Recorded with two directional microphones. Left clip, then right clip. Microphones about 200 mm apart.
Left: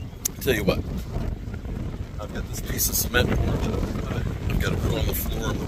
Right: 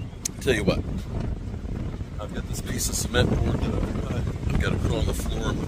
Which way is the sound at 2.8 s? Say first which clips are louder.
Left 2 dB; centre (ahead or behind).